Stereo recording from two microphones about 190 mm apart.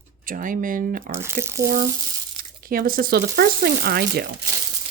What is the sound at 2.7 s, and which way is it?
Speech, 50° right (ahead or behind).